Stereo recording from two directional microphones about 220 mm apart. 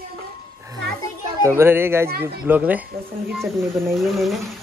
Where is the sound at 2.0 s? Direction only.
45° right (ahead or behind).